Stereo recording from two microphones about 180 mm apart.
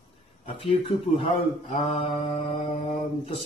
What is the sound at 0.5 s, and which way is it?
Speech, 30° left (ahead or behind).